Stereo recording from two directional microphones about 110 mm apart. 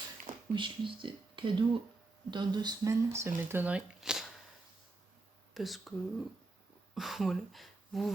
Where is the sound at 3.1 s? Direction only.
25° right (ahead or behind); by 4.3 s 5° right (ahead or behind).